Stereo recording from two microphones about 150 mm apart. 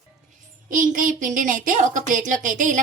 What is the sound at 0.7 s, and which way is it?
A woman's voice, 60° right (ahead or behind).